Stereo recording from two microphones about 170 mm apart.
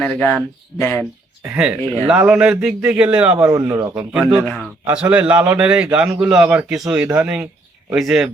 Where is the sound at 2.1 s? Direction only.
5° right (ahead or behind).